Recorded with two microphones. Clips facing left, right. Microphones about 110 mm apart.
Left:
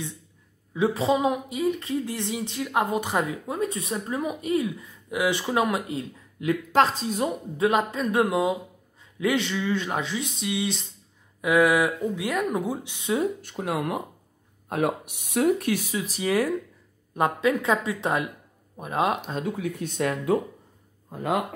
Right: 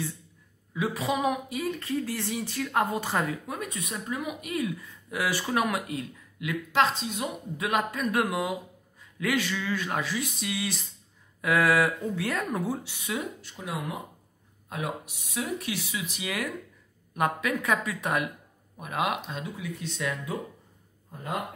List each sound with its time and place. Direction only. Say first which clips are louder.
0.7 s speech: left 6 dB; 30° left (ahead or behind)
6.7 s speech: left 3 dB; 40° left (ahead or behind)
13.4 s speech: left 7 dB; 55° left (ahead or behind); by 19.4 s 35° left (ahead or behind)
19.4 s speech: left 7 dB; 50° left (ahead or behind)
21.1 s speech: left 7 dB; 90° left